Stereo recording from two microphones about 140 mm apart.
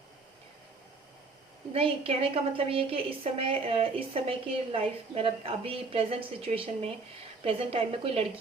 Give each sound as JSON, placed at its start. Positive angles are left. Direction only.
{"t": 1.7, "sound": "a woman's voice", "side_deg": -40}